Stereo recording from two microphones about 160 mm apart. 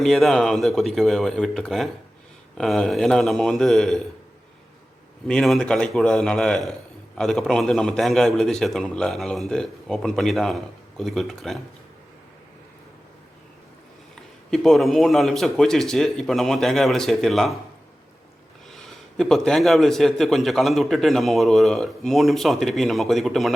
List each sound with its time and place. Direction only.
0.0 s speech: centre (ahead or behind)
5.3 s speech: 5° left (ahead or behind)
14.5 s speech: centre (ahead or behind)
18.7 s speech: centre (ahead or behind)